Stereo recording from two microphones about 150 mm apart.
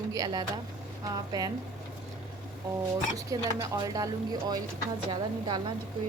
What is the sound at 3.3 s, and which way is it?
A woman's voice, 20° right (ahead or behind).